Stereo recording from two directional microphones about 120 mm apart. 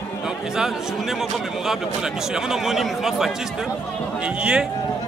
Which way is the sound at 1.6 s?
5° right (ahead or behind).